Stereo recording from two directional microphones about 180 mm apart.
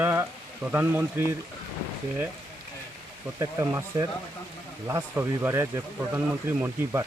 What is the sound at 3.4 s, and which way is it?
Speech, 20° right (ahead or behind).